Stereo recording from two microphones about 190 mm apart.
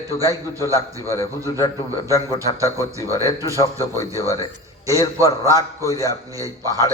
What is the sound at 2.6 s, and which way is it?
A man's voice, 15° right (ahead or behind).